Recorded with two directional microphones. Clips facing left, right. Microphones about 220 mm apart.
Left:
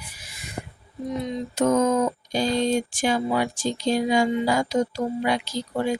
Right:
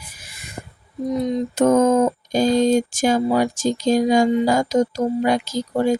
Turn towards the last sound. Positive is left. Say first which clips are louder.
# right 6 dB
turn(degrees=-45)  # may be behind; listen again after turning